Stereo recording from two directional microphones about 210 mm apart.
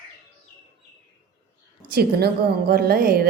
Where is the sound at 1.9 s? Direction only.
45° right (ahead or behind).